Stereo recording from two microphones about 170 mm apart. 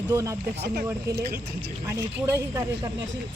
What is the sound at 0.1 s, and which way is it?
Speech, 20° right (ahead or behind).